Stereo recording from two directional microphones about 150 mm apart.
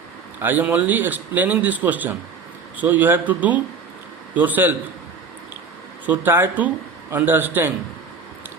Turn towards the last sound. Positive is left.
turn(degrees=-15)  # may be behind; listen again after turning